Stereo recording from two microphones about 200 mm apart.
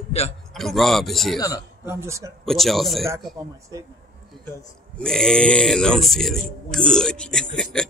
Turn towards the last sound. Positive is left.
turn(degrees=5)  # may be behind; listen again after turning